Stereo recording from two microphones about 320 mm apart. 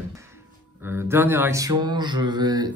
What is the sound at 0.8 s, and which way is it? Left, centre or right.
Mantra, centre.